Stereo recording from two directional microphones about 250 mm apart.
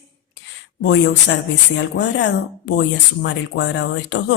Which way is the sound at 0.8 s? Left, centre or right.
Left.